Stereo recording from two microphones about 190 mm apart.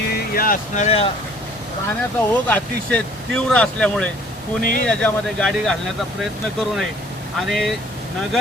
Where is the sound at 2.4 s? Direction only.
5° left (ahead or behind).